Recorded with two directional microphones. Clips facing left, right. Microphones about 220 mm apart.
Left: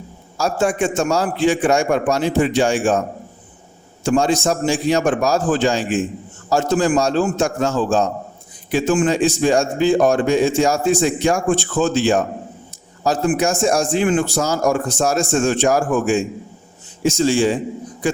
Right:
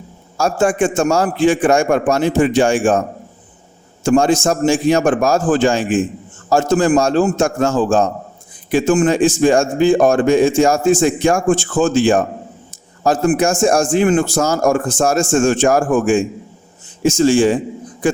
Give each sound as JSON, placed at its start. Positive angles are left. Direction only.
{"t": 0.3, "sound": "a man's voice", "side_deg": -50}
{"t": 4.0, "sound": "a man's voice", "side_deg": -50}